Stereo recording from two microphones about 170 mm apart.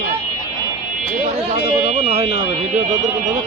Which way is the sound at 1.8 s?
35° right (ahead or behind).